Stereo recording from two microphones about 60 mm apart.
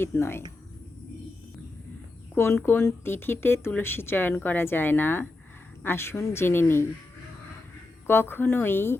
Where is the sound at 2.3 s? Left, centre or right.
Left.